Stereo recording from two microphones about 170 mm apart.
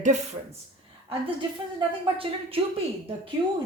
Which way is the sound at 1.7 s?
35° right (ahead or behind).